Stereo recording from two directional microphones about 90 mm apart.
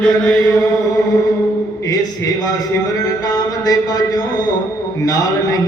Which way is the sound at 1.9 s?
45° left (ahead or behind).